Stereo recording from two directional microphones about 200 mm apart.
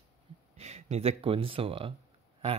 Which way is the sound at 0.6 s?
35° right (ahead or behind).